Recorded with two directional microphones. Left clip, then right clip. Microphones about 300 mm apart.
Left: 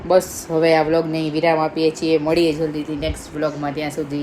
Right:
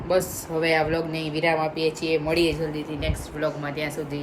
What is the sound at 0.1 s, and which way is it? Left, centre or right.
A woman's voice, centre.